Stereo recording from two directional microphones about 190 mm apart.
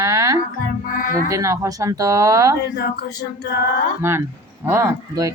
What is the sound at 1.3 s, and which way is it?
Speech, 15° right (ahead or behind).